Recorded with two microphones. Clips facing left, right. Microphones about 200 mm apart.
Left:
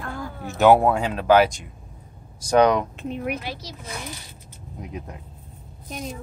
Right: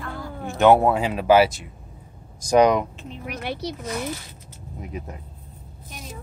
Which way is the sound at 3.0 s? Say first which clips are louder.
Left 7 dB; 55° left (ahead or behind).